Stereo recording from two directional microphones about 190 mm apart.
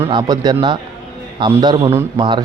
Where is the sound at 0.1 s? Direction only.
20° right (ahead or behind).